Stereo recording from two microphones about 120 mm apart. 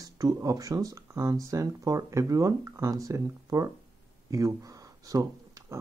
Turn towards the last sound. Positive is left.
turn(degrees=-30)  # may be behind; listen again after turning